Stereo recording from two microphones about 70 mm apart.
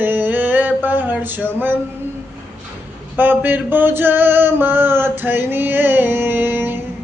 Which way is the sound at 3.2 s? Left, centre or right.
Right.